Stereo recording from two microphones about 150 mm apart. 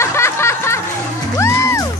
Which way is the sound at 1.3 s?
20° left (ahead or behind).